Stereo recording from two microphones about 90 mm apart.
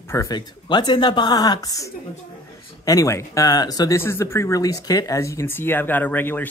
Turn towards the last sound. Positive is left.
turn(degrees=20)  # may be behind; listen again after turning